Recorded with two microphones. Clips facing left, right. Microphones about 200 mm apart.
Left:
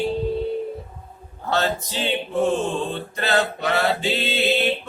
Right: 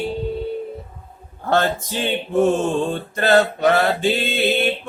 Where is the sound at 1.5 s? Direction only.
50° right (ahead or behind).